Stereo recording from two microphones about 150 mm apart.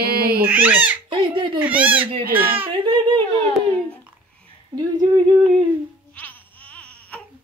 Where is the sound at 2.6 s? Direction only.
30° right (ahead or behind).